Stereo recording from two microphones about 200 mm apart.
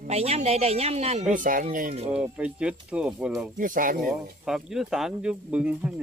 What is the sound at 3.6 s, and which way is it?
Speech, 45° right (ahead or behind).